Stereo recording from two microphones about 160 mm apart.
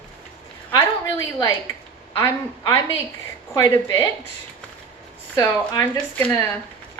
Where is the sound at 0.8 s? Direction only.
20° left (ahead or behind).